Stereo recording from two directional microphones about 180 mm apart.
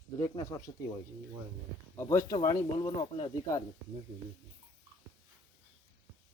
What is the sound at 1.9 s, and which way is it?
Speech, 15° left (ahead or behind).